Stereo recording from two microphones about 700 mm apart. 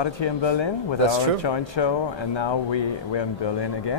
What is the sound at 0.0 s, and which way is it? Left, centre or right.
Speech, left.